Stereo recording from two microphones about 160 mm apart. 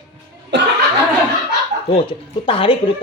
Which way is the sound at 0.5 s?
90° right.